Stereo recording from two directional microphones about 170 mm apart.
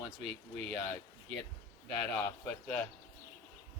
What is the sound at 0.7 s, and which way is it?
Speech, 10° left (ahead or behind).